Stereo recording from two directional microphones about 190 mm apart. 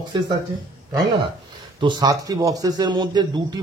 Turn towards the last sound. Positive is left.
turn(degrees=-20)  # may be behind; listen again after turning